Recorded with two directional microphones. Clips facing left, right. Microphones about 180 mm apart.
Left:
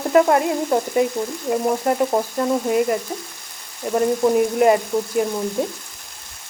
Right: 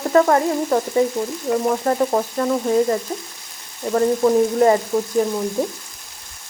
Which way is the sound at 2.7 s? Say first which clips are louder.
Right 1 dB; 15° left (ahead or behind).